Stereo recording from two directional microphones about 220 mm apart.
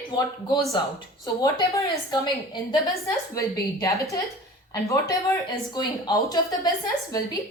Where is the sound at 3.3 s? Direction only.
15° left (ahead or behind).